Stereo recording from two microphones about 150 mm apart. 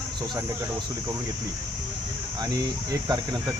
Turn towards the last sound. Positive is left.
turn(degrees=-25)  # may be behind; listen again after turning